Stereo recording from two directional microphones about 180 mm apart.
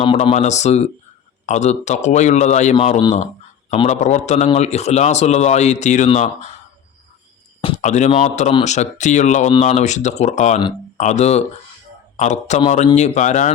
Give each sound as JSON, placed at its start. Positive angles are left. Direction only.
{"t": 0.0, "sound": "speech", "side_deg": 30}
{"t": 0.3, "sound": "a man's voice", "side_deg": 40}
{"t": 7.8, "sound": "a man's voice", "side_deg": 40}